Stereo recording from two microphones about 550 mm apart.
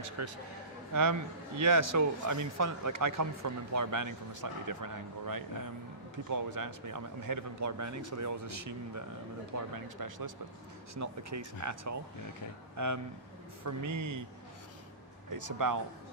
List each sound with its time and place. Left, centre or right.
0.2 s speech: right
1.6 s speech: right
15.3 s speech: right